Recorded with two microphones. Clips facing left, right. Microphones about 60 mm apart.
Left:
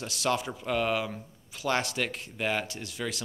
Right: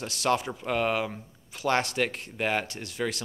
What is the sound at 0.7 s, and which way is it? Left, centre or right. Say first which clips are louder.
Speech: right 1 dB; right.